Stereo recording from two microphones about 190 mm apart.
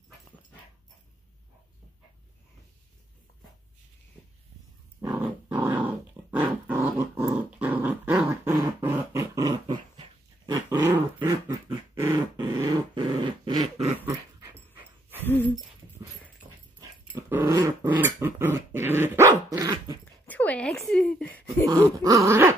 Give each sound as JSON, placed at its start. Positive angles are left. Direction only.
{"t": 5.0, "sound": "dog", "side_deg": -10}
{"t": 14.0, "sound": "dog", "side_deg": -10}
{"t": 17.1, "sound": "dog", "side_deg": -10}
{"t": 20.2, "sound": "a sound", "side_deg": 10}
{"t": 21.6, "sound": "dog", "side_deg": -20}